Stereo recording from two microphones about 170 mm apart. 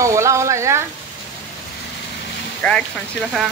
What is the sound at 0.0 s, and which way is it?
Sizzle, 15° right (ahead or behind).